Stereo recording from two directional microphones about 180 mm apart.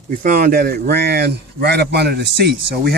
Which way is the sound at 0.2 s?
50° right (ahead or behind).